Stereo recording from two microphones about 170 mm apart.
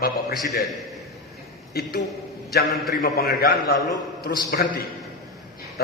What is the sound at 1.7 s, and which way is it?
Speech, 65° left (ahead or behind).